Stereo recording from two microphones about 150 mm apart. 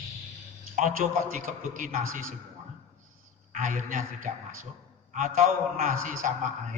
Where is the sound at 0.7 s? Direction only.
60° right (ahead or behind).